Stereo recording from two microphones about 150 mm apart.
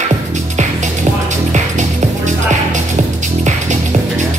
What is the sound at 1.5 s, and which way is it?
Music, 50° right (ahead or behind).